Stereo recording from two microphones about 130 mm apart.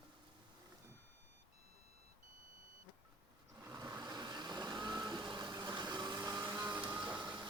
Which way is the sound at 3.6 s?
25° right (ahead or behind).